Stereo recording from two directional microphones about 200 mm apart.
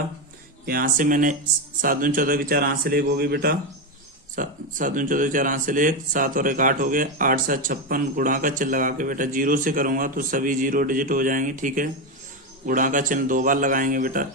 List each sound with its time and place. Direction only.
0.6 s a man's voice: 45° right (ahead or behind)